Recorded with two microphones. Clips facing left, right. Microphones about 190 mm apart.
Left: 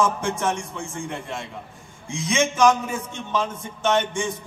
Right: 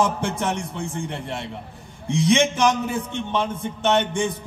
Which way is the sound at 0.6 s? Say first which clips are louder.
Right 3 dB; 60° right (ahead or behind).